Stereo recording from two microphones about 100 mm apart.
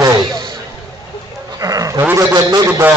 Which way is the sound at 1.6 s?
35° right (ahead or behind).